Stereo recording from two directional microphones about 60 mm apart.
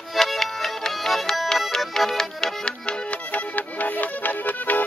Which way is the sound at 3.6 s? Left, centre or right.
Left.